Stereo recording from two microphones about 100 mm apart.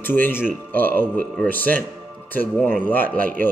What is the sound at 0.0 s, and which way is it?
Speech, 20° left (ahead or behind).